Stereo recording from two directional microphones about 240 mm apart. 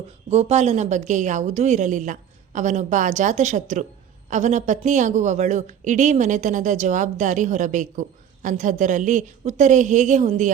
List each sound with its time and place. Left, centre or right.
0.3 s a woman's voice: right